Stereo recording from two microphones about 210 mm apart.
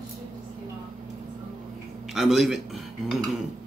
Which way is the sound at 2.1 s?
Centre (ahead or behind).